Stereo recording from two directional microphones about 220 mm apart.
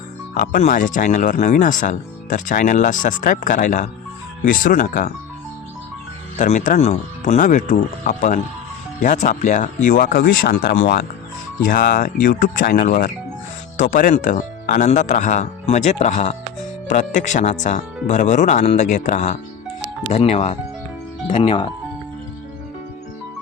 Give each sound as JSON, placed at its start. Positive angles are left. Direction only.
{"t": 0.3, "sound": "speech", "side_deg": 40}
{"t": 6.4, "sound": "speech", "side_deg": 35}